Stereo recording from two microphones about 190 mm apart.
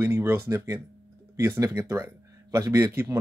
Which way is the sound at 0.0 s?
15° right (ahead or behind).